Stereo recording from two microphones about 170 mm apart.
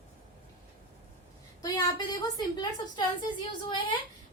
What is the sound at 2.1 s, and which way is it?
A woman's voice, 20° left (ahead or behind).